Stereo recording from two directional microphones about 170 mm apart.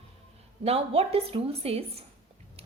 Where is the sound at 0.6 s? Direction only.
35° right (ahead or behind).